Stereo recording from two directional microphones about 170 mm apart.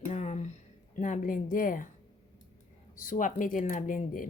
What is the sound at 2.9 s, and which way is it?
Speech, 50° left (ahead or behind).